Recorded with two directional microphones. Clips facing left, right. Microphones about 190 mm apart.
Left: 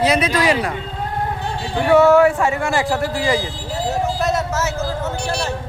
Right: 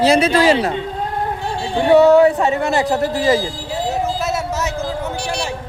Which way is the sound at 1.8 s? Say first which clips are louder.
Right 2 dB; 20° right (ahead or behind).